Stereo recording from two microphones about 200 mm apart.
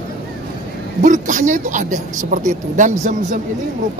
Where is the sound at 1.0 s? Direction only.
40° right (ahead or behind).